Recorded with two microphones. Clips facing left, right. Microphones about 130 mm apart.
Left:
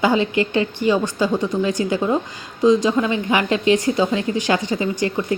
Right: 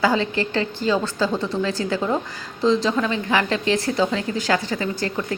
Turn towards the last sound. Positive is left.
turn(degrees=15)  # may be behind; listen again after turning